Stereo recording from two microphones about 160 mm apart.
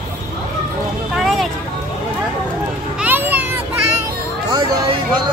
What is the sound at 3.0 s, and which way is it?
Children playing, 10° right (ahead or behind).